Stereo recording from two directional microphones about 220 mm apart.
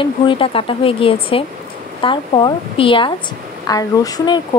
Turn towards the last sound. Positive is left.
turn(degrees=20)  # may be behind; listen again after turning